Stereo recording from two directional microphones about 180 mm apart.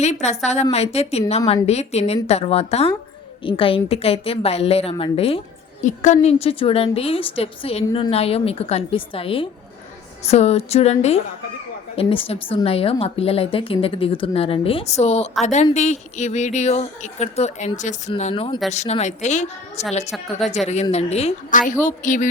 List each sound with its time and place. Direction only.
0.0 s a woman's voice: 40° left (ahead or behind)
20.1 s a woman's voice: centre (ahead or behind)
20.9 s a woman's voice: 35° left (ahead or behind)